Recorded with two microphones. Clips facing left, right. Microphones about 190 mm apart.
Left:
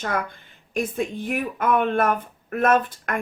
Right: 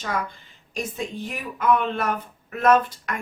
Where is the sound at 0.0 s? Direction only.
55° left (ahead or behind).